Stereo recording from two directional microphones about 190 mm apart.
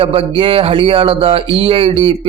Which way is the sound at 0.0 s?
30° right (ahead or behind).